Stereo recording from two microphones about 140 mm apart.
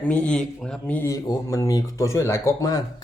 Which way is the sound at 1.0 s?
25° left (ahead or behind).